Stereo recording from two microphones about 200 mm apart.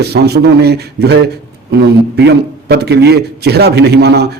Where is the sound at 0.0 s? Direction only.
55° right (ahead or behind).